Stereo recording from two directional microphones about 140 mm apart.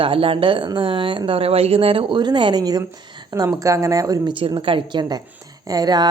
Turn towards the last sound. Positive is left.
turn(degrees=-30)  # may be behind; listen again after turning